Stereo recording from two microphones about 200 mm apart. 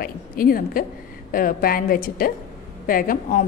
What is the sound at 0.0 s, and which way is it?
A woman's voice, 45° left (ahead or behind).